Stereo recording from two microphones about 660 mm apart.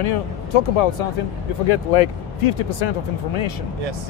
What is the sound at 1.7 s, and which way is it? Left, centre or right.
Speech, left.